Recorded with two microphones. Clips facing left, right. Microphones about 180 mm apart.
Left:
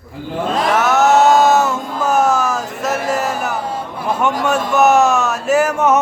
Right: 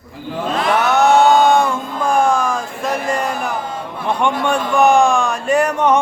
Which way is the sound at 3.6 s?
35° left (ahead or behind).